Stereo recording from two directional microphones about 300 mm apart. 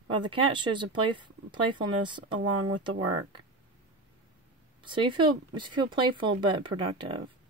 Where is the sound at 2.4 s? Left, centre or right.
Right.